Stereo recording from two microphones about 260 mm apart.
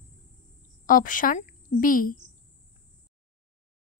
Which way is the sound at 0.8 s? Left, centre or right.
Left.